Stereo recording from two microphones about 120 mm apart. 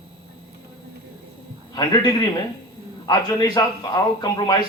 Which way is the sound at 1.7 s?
35° left (ahead or behind).